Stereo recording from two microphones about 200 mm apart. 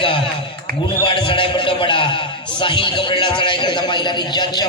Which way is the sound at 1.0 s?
25° left (ahead or behind).